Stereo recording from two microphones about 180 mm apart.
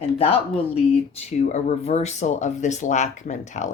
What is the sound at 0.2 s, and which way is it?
Speech, 30° left (ahead or behind).